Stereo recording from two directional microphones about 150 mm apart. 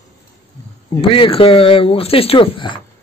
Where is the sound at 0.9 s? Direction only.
35° left (ahead or behind).